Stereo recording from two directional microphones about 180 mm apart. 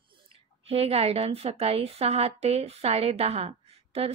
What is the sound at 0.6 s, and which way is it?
Speech, 35° right (ahead or behind).